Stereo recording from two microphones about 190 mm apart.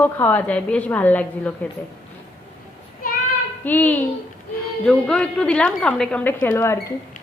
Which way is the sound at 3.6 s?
10° left (ahead or behind).